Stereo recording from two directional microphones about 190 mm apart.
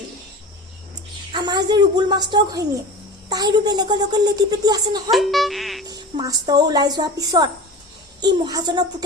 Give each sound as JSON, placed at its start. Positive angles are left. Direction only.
{"t": 1.3, "sound": "a woman's voice", "side_deg": -25}
{"t": 5.1, "sound": "speech", "side_deg": 0}
{"t": 5.9, "sound": "speech", "side_deg": -20}